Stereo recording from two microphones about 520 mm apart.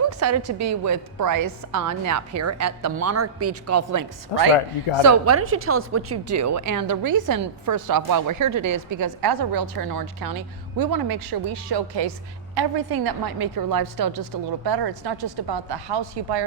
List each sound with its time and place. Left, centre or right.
0.1 s a woman's voice: right
4.5 s a man's voice: left
5.0 s a woman's voice: right